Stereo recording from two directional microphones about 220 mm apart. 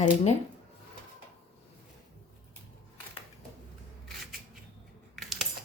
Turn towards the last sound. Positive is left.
turn(degrees=0)  # may be behind; listen again after turning